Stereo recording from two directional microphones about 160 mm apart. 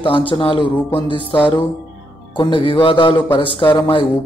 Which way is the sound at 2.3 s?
30° left (ahead or behind).